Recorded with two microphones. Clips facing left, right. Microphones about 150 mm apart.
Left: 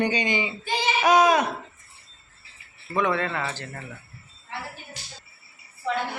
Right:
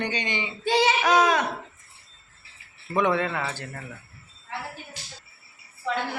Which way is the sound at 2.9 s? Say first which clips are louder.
Right 1 dB; 15° right (ahead or behind).